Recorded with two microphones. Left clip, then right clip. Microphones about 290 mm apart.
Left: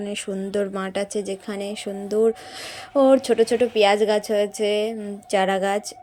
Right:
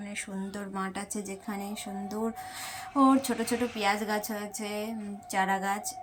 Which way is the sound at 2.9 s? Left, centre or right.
Centre.